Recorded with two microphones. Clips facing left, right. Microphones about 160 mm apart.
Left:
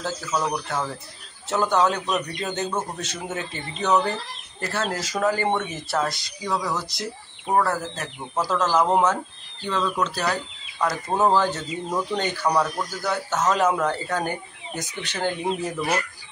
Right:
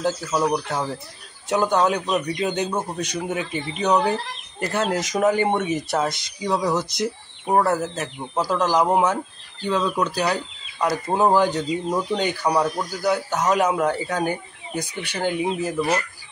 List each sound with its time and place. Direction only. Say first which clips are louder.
0.0 s speech: right 4 dB; 10° right (ahead or behind)